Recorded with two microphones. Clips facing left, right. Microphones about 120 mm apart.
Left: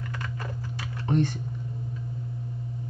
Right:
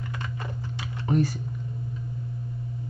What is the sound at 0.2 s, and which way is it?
Typing, 25° right (ahead or behind).